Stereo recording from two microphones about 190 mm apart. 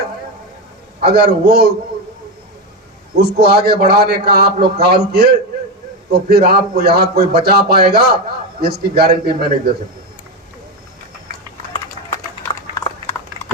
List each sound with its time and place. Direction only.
1.0 s speech: 60° right (ahead or behind)
3.2 s speech: 60° right (ahead or behind)
12.4 s a sound: 15° left (ahead or behind)